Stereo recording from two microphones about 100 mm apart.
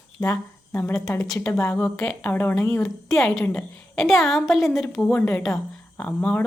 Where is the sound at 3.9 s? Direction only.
Centre (ahead or behind).